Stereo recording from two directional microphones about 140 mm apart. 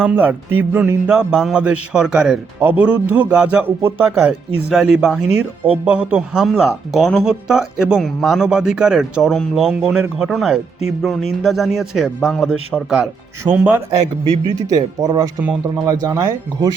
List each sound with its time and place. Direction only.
0.0 s speech: 10° right (ahead or behind)
4.2 s speech: 5° right (ahead or behind)
14.7 s speech: 25° right (ahead or behind)